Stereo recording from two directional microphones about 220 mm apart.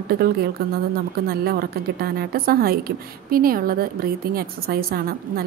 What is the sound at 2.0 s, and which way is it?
A woman's voice, 45° right (ahead or behind).